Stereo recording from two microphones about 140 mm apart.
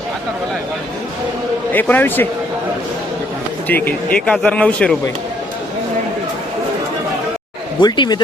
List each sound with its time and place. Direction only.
1.7 s speech: 15° left (ahead or behind)
3.7 s speech: 15° left (ahead or behind)
7.8 s speech: 30° left (ahead or behind)